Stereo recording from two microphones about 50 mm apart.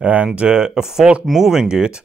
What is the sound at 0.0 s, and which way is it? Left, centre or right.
Speech, right.